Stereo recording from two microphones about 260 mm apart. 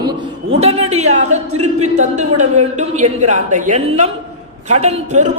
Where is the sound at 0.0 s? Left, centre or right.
Centre.